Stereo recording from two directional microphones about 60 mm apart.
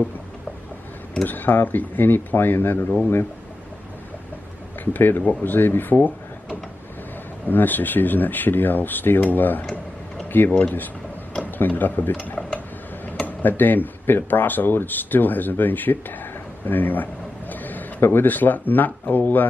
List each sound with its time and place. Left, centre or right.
1.2 s speech: left
4.9 s speech: left
10.2 s a sound: left
11.5 s speech: left
12.5 s a sound: left
13.4 s speech: left